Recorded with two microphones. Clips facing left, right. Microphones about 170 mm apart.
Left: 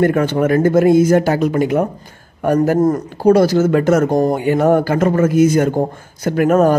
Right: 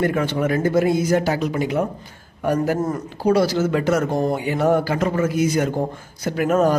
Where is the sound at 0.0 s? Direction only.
50° left (ahead or behind).